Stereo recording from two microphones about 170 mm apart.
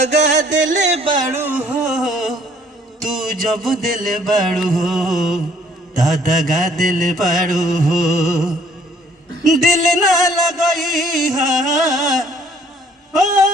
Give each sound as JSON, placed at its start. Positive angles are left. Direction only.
{"t": 0.0, "sound": "music", "side_deg": -45}
{"t": 0.7, "sound": "speech", "side_deg": -40}
{"t": 1.3, "sound": "a sound", "side_deg": -10}
{"t": 3.0, "sound": "music", "side_deg": 0}
{"t": 6.5, "sound": "music", "side_deg": 0}